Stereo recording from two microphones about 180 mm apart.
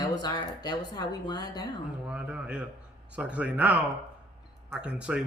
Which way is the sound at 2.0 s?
5° right (ahead or behind).